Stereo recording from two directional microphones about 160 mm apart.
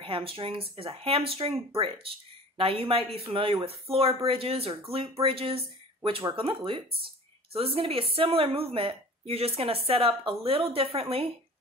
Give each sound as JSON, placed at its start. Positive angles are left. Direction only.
{"t": 0.0, "sound": "speech", "side_deg": -35}